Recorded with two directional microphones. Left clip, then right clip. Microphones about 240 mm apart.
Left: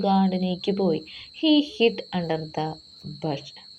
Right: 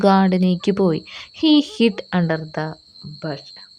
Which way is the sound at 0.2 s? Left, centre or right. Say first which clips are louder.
Right 6 dB; right.